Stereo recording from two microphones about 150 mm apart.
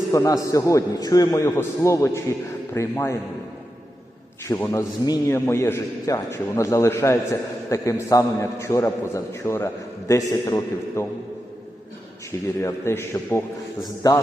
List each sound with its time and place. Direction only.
0.1 s a man's voice: 20° left (ahead or behind)
4.4 s a man's voice: 15° left (ahead or behind)
12.6 s a man's voice: 15° left (ahead or behind)